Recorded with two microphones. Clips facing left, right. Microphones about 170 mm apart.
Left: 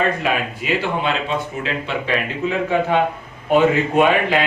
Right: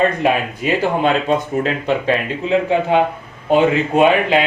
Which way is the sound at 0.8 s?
45° right (ahead or behind).